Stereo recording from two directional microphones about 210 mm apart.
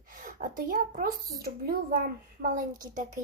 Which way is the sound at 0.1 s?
40° right (ahead or behind).